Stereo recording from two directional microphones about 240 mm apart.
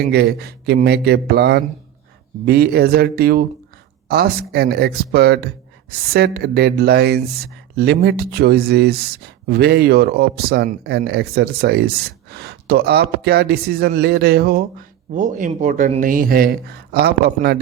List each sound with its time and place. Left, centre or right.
0.1 s speech: right